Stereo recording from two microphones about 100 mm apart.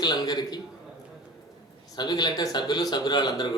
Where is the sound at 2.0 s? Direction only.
45° left (ahead or behind).